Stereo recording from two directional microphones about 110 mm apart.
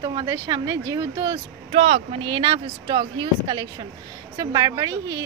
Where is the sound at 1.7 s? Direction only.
65° right (ahead or behind).